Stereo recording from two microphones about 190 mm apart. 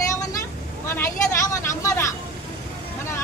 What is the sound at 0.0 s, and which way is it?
Vehicle, 15° left (ahead or behind).